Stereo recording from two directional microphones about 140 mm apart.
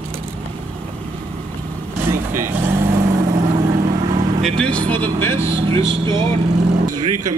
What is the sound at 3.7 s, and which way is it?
Vehicle, 55° right (ahead or behind).